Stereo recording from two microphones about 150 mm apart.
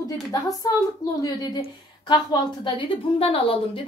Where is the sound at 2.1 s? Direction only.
30° left (ahead or behind).